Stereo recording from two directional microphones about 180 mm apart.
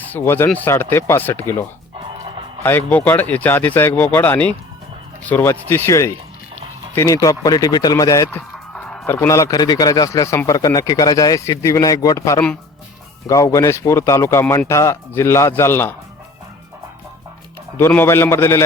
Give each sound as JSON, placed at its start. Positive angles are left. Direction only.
{"t": 0.0, "sound": "speech", "side_deg": 10}
{"t": 2.6, "sound": "speech", "side_deg": 10}
{"t": 17.7, "sound": "speech", "side_deg": 10}